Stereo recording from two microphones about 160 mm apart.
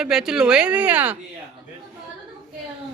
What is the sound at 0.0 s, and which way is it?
Speech, 5° right (ahead or behind).